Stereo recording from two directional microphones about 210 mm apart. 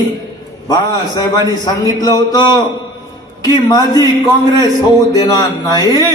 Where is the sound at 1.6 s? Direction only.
20° left (ahead or behind).